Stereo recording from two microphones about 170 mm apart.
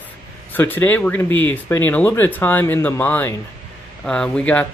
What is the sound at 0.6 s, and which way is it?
Speech, 10° left (ahead or behind).